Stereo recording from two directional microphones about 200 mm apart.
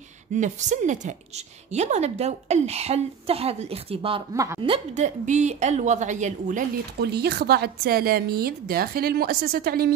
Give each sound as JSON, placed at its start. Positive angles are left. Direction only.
{"t": 0.4, "sound": "a woman's voice", "side_deg": -35}
{"t": 4.3, "sound": "a woman's voice", "side_deg": -15}
{"t": 4.6, "sound": "a woman's voice", "side_deg": -25}
{"t": 7.0, "sound": "a woman's voice", "side_deg": -55}